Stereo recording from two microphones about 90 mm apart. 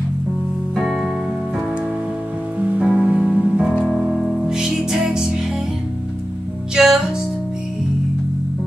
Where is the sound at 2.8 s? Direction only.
5° right (ahead or behind).